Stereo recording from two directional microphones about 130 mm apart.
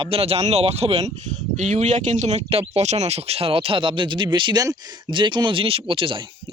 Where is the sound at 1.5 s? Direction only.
65° right (ahead or behind); by 6.2 s 40° right (ahead or behind).